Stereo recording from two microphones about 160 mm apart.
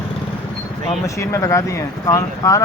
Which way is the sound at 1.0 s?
20° left (ahead or behind).